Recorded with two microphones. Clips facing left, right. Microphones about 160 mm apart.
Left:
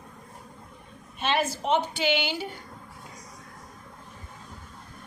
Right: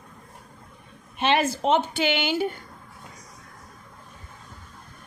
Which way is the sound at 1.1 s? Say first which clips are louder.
Right 4 dB; 80° right.